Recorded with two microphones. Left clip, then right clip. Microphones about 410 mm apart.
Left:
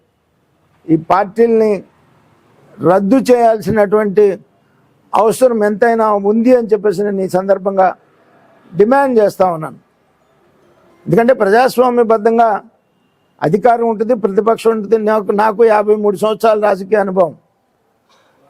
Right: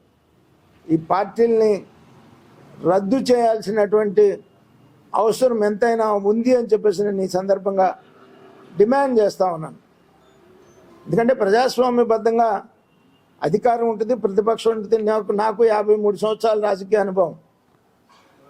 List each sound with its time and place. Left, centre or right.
0.9 s speech: left
2.8 s speech: left
11.1 s speech: left